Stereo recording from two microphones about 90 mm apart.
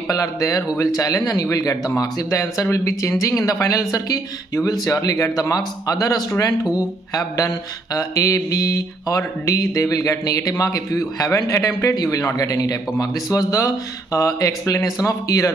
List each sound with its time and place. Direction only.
0.1 s mantra: 40° left (ahead or behind)